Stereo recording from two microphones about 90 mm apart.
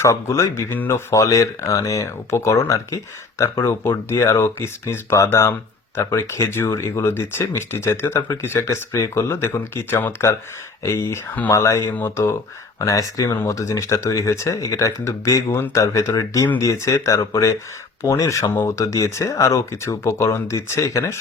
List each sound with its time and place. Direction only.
0.0 s speech: 35° left (ahead or behind)
12.8 s speech: 40° left (ahead or behind)